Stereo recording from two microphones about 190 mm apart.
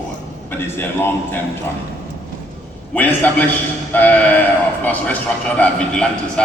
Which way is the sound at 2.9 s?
10° left (ahead or behind).